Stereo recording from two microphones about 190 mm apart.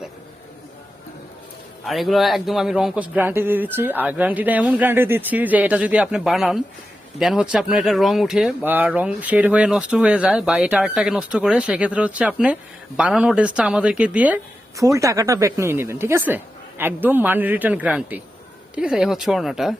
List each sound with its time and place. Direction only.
1.8 s a man's voice: centre (ahead or behind)
14.8 s a man's voice: 15° right (ahead or behind); by 19.7 s centre (ahead or behind)